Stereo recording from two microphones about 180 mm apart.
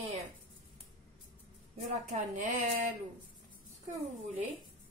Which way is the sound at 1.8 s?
45° right (ahead or behind).